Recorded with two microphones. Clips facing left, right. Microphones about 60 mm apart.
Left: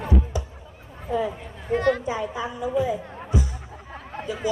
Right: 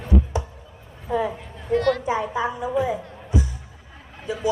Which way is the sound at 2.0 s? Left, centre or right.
Right.